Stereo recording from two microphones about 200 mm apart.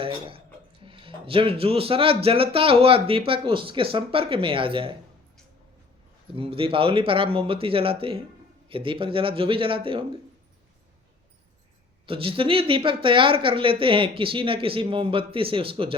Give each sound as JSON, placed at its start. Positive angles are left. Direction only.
{"t": 0.0, "sound": "speech", "side_deg": -25}
{"t": 6.3, "sound": "speech", "side_deg": -30}
{"t": 12.0, "sound": "speech", "side_deg": -25}